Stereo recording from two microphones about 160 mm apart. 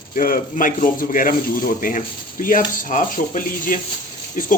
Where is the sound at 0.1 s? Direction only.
60° left (ahead or behind).